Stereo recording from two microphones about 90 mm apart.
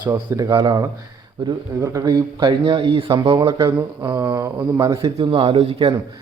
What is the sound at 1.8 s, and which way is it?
Speech, 40° right (ahead or behind).